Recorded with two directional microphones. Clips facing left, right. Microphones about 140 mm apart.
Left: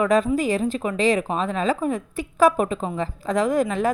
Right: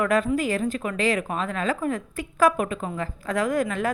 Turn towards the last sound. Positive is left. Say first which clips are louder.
# left 3 dB
turn(degrees=20)  # may be behind; listen again after turning